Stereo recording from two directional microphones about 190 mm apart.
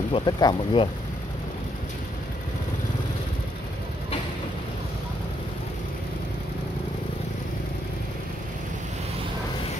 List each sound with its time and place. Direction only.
0.1 s speech: 20° left (ahead or behind)